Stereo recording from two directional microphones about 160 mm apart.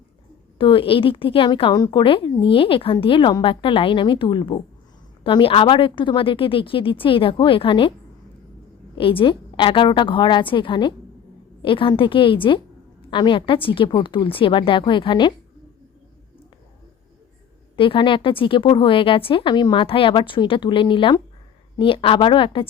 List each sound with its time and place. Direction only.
0.6 s a woman's voice: 35° left (ahead or behind)
9.0 s a woman's voice: 35° left (ahead or behind)
17.7 s a woman's voice: 30° left (ahead or behind)